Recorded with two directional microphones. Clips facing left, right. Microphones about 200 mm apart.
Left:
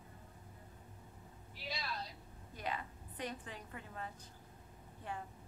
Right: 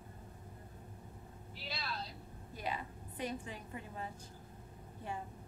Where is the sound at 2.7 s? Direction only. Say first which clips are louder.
Right 1 dB; 10° right (ahead or behind).